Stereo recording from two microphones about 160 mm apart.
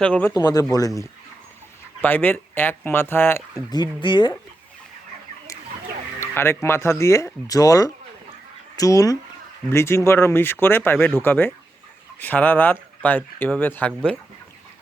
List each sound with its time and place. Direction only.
0.0 s speech: 10° left (ahead or behind)
0.3 s speech: 25° left (ahead or behind)
2.0 s speech: 10° left (ahead or behind)
3.7 s speech: 25° left (ahead or behind)
6.1 s speech: 15° left (ahead or behind)